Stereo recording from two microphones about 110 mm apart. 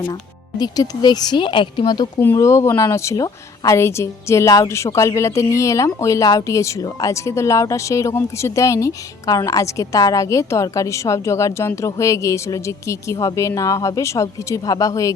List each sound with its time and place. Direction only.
0.6 s speech: 35° left (ahead or behind)
2.1 s a woman's voice: 25° left (ahead or behind)